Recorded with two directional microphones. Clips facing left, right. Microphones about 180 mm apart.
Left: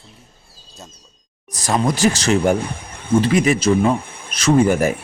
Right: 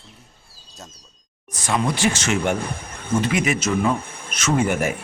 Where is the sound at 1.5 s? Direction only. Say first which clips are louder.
Left 3 dB; 35° left (ahead or behind).